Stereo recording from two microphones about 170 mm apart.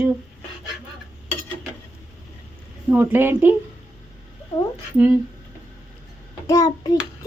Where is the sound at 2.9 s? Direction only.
10° right (ahead or behind).